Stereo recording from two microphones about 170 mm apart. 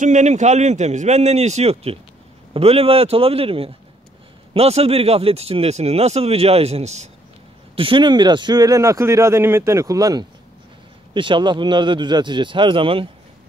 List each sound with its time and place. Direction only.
0.0 s speech: 45° right (ahead or behind)
7.7 s speech: 30° right (ahead or behind)